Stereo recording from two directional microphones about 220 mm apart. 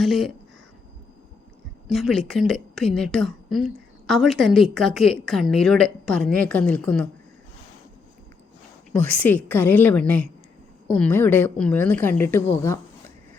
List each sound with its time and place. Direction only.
0.0 s a woman's voice: centre (ahead or behind)
1.9 s a woman's voice: centre (ahead or behind)
8.9 s a woman's voice: 5° left (ahead or behind)